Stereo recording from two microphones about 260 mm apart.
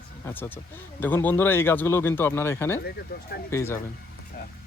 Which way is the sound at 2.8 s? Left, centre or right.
Left.